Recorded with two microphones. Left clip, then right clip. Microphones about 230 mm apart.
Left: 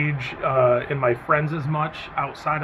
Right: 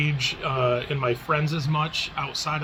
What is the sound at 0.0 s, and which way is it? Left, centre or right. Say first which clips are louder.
Speech: left 1 dB; centre.